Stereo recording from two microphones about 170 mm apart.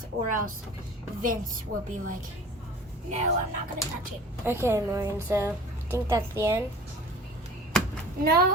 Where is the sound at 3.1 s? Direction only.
40° right (ahead or behind).